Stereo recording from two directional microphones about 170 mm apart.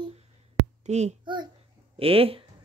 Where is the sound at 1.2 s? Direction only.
25° right (ahead or behind).